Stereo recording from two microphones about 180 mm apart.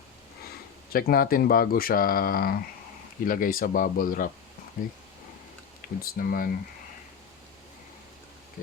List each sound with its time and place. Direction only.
0.9 s speech: 55° left (ahead or behind)
6.0 s speech: 55° left (ahead or behind)